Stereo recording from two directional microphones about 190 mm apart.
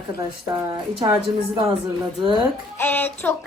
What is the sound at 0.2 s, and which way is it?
Speech, 20° right (ahead or behind).